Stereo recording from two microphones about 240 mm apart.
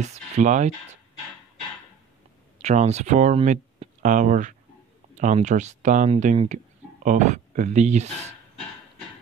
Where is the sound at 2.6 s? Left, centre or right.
Right.